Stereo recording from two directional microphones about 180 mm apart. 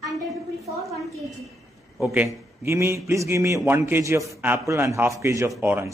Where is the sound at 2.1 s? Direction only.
15° right (ahead or behind).